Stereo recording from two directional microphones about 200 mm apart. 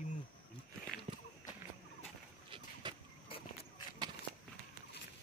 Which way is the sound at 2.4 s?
25° right (ahead or behind).